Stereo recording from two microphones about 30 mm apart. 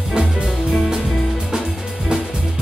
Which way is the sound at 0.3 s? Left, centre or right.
Centre.